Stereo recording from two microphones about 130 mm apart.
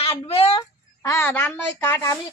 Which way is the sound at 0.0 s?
50° left (ahead or behind).